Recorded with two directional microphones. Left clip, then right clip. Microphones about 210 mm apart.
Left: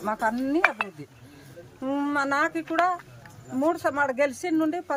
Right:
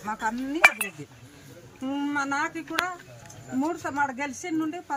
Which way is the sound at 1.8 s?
20° left (ahead or behind).